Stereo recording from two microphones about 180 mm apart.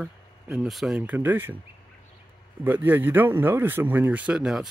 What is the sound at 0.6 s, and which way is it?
Speech, centre (ahead or behind).